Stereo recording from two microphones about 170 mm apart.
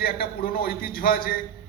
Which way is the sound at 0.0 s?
65° left (ahead or behind).